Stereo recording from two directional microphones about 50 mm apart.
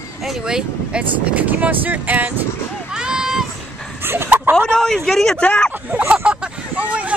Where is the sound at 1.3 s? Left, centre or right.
Right.